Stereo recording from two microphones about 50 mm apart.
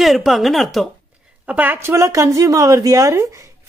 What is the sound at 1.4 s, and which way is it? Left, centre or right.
Speech, right.